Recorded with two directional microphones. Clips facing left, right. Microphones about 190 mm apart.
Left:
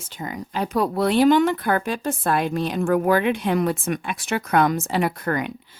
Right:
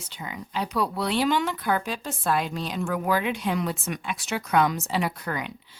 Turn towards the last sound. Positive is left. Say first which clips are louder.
# left 7 dB
turn(degrees=50)  # may be behind; listen again after turning